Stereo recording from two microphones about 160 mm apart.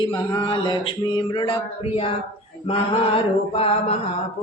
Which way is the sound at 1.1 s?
30° left (ahead or behind).